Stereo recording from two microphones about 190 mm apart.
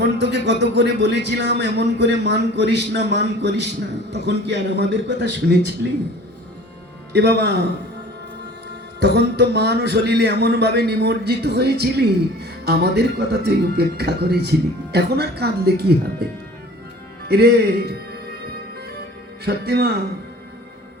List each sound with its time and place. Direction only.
0.2 s a man's voice: 65° right (ahead or behind)
7.1 s a man's voice: 60° right (ahead or behind)
9.0 s a man's voice: 60° right (ahead or behind)
17.2 s a man's voice: 60° right (ahead or behind)
19.5 s a man's voice: 60° right (ahead or behind)